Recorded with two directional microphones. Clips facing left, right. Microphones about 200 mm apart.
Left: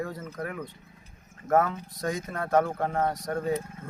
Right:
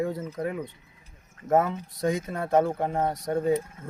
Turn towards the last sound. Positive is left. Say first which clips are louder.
# right 4 dB
turn(degrees=-25)  # may be behind; listen again after turning